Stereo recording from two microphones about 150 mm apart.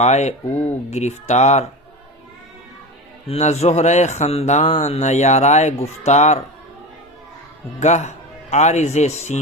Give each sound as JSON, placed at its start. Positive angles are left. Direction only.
{"t": 0.0, "sound": "speech", "side_deg": 50}
{"t": 3.2, "sound": "speech", "side_deg": 45}
{"t": 7.8, "sound": "a man's voice", "side_deg": 50}